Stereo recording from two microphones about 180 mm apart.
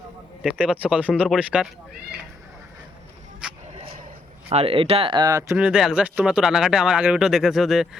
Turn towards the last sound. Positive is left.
turn(degrees=0)  # may be behind; listen again after turning